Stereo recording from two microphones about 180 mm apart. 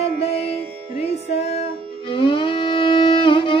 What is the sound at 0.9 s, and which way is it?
Music, 35° left (ahead or behind).